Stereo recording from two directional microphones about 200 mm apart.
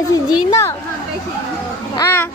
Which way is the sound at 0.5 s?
15° left (ahead or behind).